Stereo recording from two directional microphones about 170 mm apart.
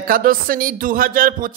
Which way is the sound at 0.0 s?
55° right (ahead or behind).